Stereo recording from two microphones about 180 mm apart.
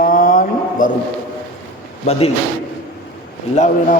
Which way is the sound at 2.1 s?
35° left (ahead or behind).